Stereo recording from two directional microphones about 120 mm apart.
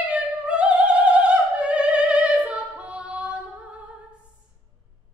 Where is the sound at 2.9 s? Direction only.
10° right (ahead or behind).